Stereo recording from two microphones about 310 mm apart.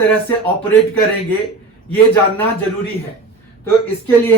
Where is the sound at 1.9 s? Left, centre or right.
Centre.